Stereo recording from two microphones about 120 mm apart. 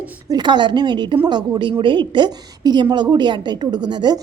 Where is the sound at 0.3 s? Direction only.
40° right (ahead or behind).